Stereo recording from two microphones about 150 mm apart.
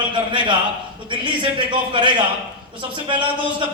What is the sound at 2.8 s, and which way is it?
Speech, 30° right (ahead or behind).